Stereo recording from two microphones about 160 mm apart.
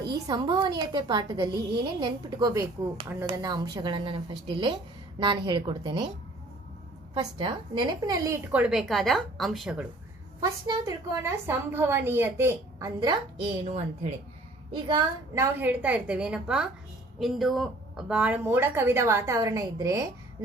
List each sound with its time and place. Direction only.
0.1 s speech: 25° right (ahead or behind)
7.2 s speech: 30° right (ahead or behind)
8.5 s a woman's voice: 5° right (ahead or behind)
10.7 s speech: 20° right (ahead or behind)
13.7 s speech: 45° right (ahead or behind)
14.7 s a woman's voice: 30° right (ahead or behind)
15.4 s speech: 10° right (ahead or behind)